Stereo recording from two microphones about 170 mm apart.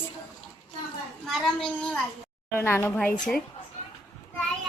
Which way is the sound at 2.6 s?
15° left (ahead or behind).